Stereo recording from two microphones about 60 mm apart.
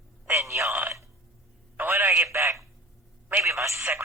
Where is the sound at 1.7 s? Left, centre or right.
Right.